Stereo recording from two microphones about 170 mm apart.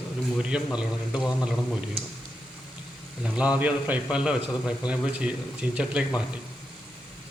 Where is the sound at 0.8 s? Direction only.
5° right (ahead or behind).